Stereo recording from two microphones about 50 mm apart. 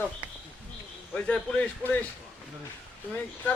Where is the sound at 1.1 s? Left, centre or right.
Left.